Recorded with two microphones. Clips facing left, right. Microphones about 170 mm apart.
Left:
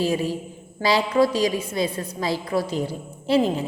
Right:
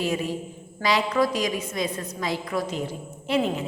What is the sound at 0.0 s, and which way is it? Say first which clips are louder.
A woman's voice: left 3 dB; 35° left (ahead or behind).